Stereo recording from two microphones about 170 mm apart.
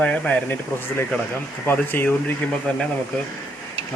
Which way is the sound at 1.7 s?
10° left (ahead or behind).